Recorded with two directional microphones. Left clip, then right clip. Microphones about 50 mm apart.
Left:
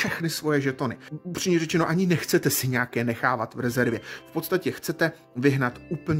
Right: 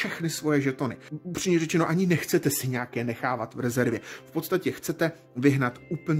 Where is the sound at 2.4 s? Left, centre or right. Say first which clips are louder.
Left 3 dB; left.